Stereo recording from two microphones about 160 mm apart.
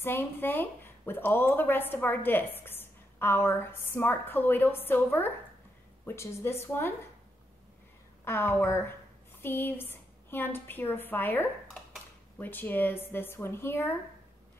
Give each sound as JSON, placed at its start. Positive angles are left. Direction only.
{"t": 0.0, "sound": "a woman's voice", "side_deg": 15}
{"t": 8.3, "sound": "a woman's voice", "side_deg": 15}